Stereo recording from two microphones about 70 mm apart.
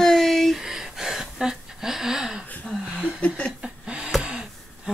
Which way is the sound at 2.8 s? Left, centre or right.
Centre.